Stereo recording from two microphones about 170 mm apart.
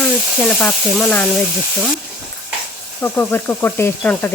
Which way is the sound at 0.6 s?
5° left (ahead or behind).